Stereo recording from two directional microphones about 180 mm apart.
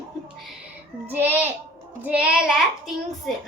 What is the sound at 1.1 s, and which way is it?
Music, 10° right (ahead or behind).